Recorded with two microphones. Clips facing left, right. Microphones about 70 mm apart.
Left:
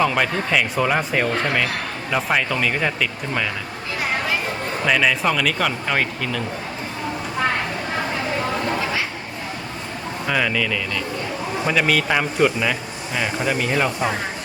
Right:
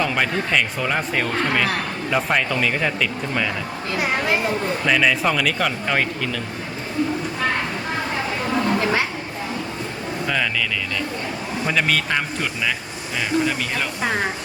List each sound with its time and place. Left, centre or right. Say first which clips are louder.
0.0 s speech: left 2 dB; centre
4.9 s speech: even; centre
10.2 s speech: left 3 dB; centre